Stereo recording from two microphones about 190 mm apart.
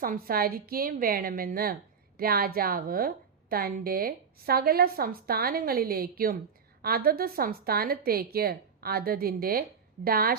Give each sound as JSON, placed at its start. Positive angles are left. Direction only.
{"t": 0.0, "sound": "a woman's voice", "side_deg": -50}